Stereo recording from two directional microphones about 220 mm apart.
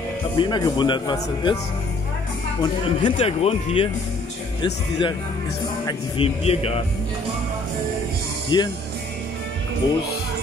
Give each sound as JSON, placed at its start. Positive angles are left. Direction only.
{"t": 0.4, "sound": "speech", "side_deg": 20}
{"t": 2.6, "sound": "speech", "side_deg": 25}
{"t": 5.9, "sound": "speech", "side_deg": 25}
{"t": 8.5, "sound": "speech", "side_deg": 20}